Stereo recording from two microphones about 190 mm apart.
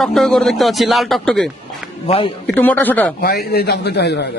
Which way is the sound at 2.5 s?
10° left (ahead or behind).